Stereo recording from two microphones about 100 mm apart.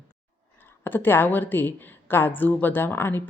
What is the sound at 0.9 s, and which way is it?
Speech, 20° left (ahead or behind).